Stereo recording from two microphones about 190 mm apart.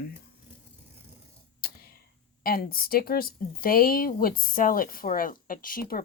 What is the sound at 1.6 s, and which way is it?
Whispering, 50° left (ahead or behind).